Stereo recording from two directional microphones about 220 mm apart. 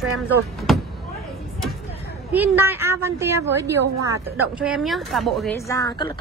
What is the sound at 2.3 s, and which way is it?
A woman's voice, 10° right (ahead or behind).